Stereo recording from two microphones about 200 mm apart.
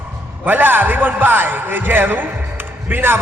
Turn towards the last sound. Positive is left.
turn(degrees=-10)  # may be behind; listen again after turning